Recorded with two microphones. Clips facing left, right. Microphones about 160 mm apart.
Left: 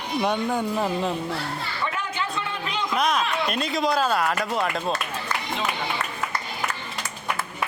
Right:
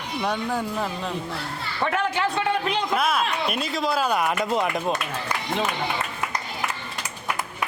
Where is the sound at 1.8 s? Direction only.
65° right (ahead or behind).